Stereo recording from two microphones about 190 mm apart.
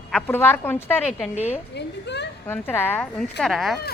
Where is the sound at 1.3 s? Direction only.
35° left (ahead or behind).